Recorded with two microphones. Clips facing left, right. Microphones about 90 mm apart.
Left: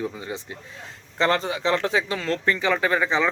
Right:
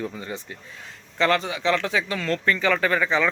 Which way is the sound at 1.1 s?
30° left (ahead or behind).